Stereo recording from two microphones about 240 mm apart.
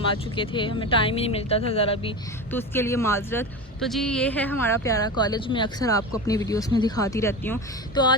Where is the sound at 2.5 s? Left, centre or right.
Centre.